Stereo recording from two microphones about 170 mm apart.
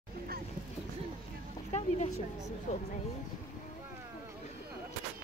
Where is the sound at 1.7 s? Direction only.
40° left (ahead or behind).